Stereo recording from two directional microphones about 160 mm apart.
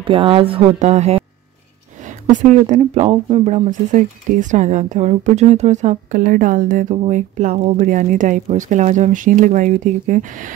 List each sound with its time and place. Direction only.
0.0 s speech: 35° right (ahead or behind)
0.7 s speech: 45° right (ahead or behind)
2.3 s speech: 45° right (ahead or behind)